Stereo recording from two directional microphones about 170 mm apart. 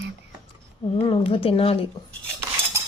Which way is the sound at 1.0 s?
30° left (ahead or behind).